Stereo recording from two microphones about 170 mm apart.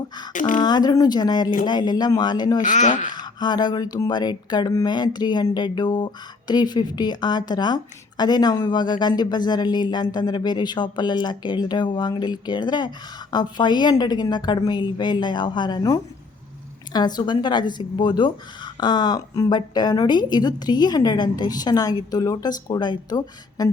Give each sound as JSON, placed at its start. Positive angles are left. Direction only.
{"t": 0.3, "sound": "speech", "side_deg": 50}
{"t": 0.6, "sound": "speech", "side_deg": 25}
{"t": 2.6, "sound": "speech", "side_deg": 45}
{"t": 3.2, "sound": "speech", "side_deg": 25}